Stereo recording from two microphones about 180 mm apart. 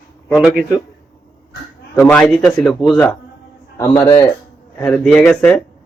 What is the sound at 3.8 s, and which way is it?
Speech, 20° left (ahead or behind).